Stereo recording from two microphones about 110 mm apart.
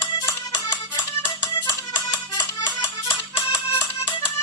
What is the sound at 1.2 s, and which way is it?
Music, 40° left (ahead or behind).